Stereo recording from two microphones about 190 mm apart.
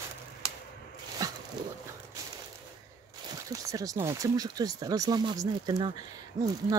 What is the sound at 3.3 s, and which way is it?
Speech, 20° right (ahead or behind).